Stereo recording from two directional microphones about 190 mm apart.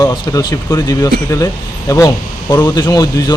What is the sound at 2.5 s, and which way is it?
Speech, 15° left (ahead or behind).